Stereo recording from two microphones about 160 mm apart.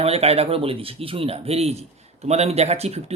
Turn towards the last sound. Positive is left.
turn(degrees=-40)  # may be behind; listen again after turning